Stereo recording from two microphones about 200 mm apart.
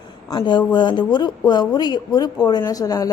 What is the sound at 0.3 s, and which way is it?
A woman's voice, 20° left (ahead or behind).